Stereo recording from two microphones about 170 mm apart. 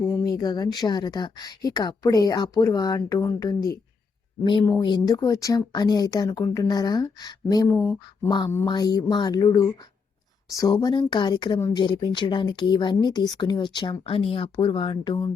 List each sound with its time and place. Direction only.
0.0 s speech: 20° left (ahead or behind)
8.0 s speech: 25° left (ahead or behind)